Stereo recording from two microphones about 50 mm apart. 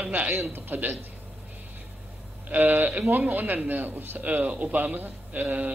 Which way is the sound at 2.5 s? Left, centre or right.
Right.